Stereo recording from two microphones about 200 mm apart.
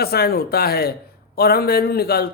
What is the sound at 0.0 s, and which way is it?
A man's voice, 50° left (ahead or behind).